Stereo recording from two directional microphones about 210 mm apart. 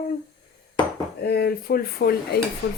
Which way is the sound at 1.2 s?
45° left (ahead or behind).